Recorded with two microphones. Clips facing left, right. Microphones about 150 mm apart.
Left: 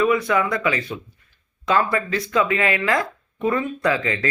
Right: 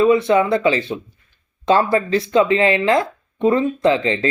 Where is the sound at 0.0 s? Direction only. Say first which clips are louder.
Right 5 dB; 25° right (ahead or behind).